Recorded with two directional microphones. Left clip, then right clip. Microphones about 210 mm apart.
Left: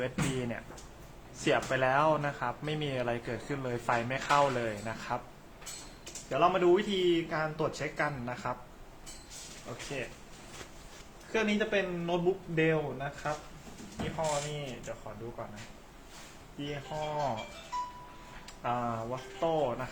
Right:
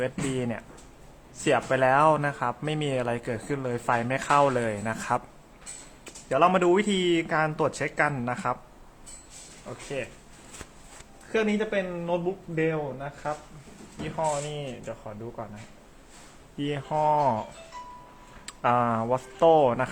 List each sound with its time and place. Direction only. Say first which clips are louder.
0.0 s a man's voice: right 5 dB; 30° right (ahead or behind)
6.2 s a man's voice: right 5 dB; 40° right (ahead or behind)
11.3 s a man's voice: right 4 dB; 40° right (ahead or behind)
14.9 s speech: right 4 dB; 50° right (ahead or behind)
16.6 s speech: right 10 dB; 55° right (ahead or behind)
18.4 s speech: right 10 dB; 55° right (ahead or behind)